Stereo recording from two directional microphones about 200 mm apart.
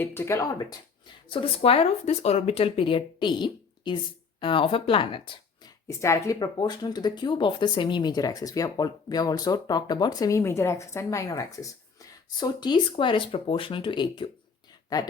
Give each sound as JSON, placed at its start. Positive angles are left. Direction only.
{"t": 0.0, "sound": "speech", "side_deg": 10}